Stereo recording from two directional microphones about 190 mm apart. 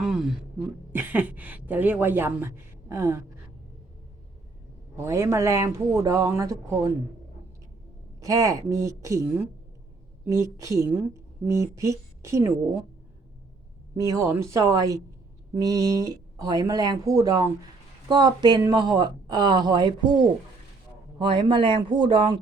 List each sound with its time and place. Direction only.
0.0 s a sound: 5° right (ahead or behind)
0.9 s a woman's voice: 10° right (ahead or behind)
4.9 s a woman's voice: 15° right (ahead or behind)
8.2 s a woman's voice: 15° right (ahead or behind)
10.2 s a woman's voice: 15° right (ahead or behind)
14.0 s a woman's voice: 15° right (ahead or behind)